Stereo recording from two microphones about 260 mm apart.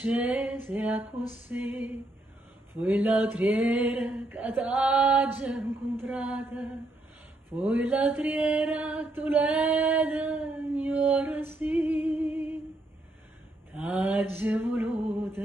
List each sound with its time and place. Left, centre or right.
0.0 s mantra: centre
1.5 s music: centre
2.9 s mantra: centre
7.7 s mantra: centre
13.7 s mantra: centre
15.1 s music: centre